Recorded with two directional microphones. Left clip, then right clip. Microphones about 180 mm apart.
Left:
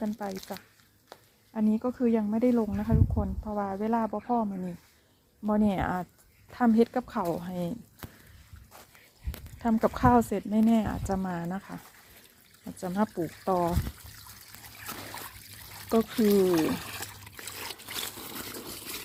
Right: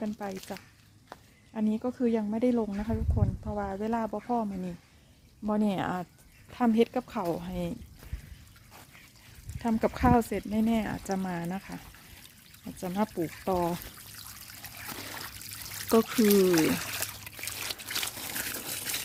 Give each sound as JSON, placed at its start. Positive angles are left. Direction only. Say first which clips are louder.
{"t": 0.0, "sound": "speech", "louder": "left 1 dB", "side_deg": -5}
{"t": 1.1, "sound": "a sound", "louder": "right 2 dB", "side_deg": 30}
{"t": 1.5, "sound": "speech", "louder": "left 2 dB", "side_deg": 5}
{"t": 9.6, "sound": "speech", "louder": "left 2 dB", "side_deg": -10}
{"t": 10.9, "sound": "speech", "louder": "left 1 dB", "side_deg": -20}
{"t": 12.6, "sound": "speech", "louder": "left 1 dB", "side_deg": -10}
{"t": 15.9, "sound": "speech", "louder": "right 2 dB", "side_deg": -25}
{"t": 16.6, "sound": "trickle", "louder": "right 2 dB", "side_deg": -20}
{"t": 18.2, "sound": "water", "louder": "right 4 dB", "side_deg": -25}